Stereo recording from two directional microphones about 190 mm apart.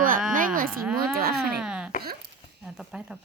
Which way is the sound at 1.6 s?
5° right (ahead or behind).